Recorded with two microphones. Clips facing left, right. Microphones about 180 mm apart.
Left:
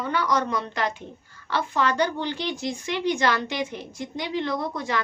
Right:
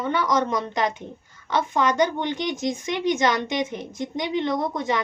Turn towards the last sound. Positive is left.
turn(degrees=-20)  # may be behind; listen again after turning